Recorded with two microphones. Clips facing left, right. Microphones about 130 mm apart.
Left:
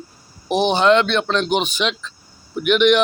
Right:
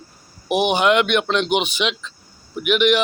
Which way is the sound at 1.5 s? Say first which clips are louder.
Even; 45° left (ahead or behind).